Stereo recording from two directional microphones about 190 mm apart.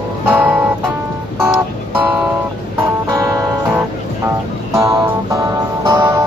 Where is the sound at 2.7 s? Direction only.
15° right (ahead or behind).